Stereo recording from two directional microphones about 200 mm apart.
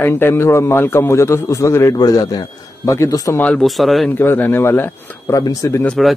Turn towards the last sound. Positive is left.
turn(degrees=5)  # may be behind; listen again after turning